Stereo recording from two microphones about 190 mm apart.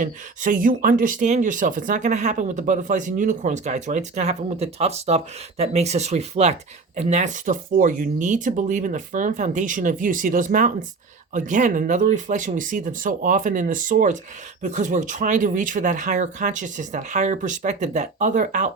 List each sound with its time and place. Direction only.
0.0 s speech: 45° right (ahead or behind)